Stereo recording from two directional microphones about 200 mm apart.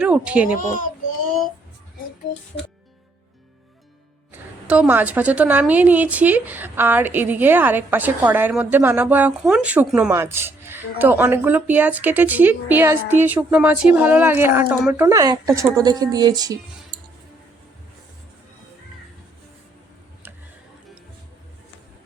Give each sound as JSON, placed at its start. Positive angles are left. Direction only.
{"t": 0.0, "sound": "speech", "side_deg": -5}
{"t": 0.4, "sound": "child singing", "side_deg": 40}
{"t": 4.3, "sound": "a woman's voice", "side_deg": -10}